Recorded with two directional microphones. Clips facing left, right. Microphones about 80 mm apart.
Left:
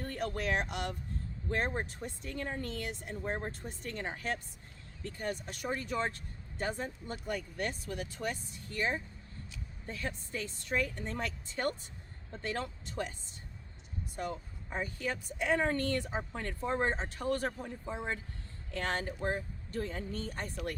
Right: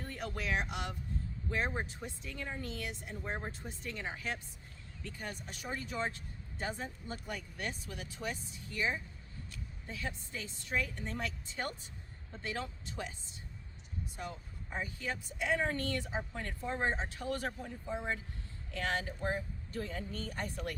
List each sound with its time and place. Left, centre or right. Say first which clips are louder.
0.0 s speech: left 5 dB; left
14.8 s a woman's voice: left 3 dB; left
18.7 s a woman's voice: left 1 dB; left